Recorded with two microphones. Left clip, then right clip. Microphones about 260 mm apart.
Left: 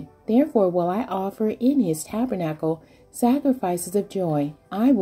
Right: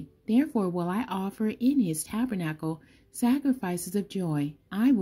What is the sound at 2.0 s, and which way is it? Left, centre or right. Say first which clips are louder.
Speech: left 6 dB; right.